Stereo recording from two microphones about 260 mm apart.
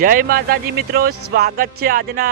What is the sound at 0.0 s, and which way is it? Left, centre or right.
Speech, right.